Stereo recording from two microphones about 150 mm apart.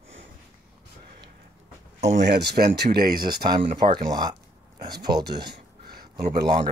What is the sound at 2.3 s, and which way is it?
Speech, 90° right.